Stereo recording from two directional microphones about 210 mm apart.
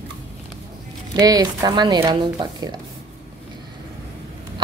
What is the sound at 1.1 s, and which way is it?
Speech, 20° right (ahead or behind).